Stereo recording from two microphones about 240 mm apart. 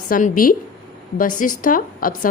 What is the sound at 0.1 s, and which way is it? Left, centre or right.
A woman's voice, left.